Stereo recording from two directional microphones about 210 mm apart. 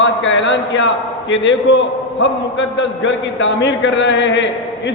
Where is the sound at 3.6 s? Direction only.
55° left (ahead or behind).